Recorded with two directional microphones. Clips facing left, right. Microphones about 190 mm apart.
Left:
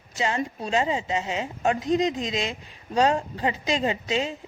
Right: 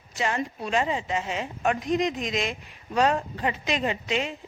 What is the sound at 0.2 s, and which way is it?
A woman's voice, 25° left (ahead or behind).